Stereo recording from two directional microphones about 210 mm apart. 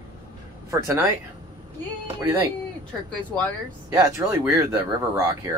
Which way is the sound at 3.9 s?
15° right (ahead or behind).